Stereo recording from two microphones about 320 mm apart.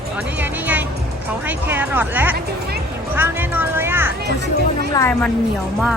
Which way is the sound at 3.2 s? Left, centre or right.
Centre.